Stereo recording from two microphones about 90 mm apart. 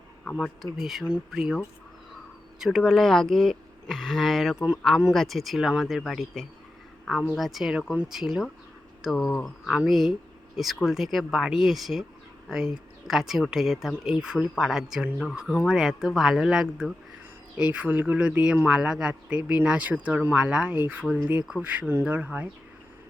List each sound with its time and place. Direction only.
0.3 s a woman's voice: centre (ahead or behind); by 22.4 s 15° right (ahead or behind)